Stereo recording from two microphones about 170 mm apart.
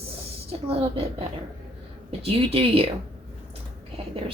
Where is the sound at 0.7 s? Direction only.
35° right (ahead or behind).